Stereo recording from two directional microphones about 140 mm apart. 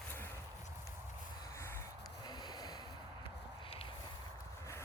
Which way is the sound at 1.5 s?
20° left (ahead or behind).